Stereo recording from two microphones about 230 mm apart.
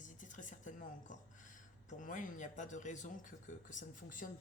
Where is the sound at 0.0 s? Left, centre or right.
Left.